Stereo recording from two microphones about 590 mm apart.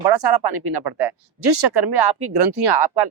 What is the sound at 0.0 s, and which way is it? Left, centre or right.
Speech, right.